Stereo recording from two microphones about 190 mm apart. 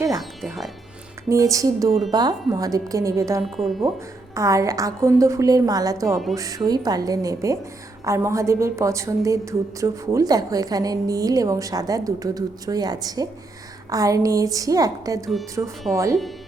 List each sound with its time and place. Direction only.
0.2 s speech: centre (ahead or behind)
1.3 s a woman's voice: 15° right (ahead or behind)
3.4 s speech: centre (ahead or behind)
4.4 s a woman's voice: 15° right (ahead or behind)